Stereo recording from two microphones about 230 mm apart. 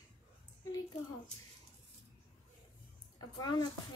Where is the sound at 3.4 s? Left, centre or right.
Centre.